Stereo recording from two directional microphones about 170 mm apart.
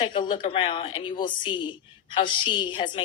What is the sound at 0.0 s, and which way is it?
A woman's voice, 30° left (ahead or behind).